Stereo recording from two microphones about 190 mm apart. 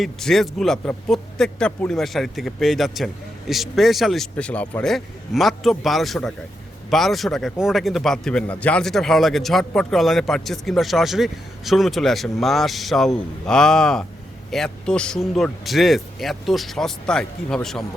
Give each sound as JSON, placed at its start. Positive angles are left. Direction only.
{"t": 0.0, "sound": "a man's voice", "side_deg": 0}